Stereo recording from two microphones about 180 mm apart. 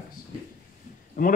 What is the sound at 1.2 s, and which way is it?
Speech, 50° left (ahead or behind).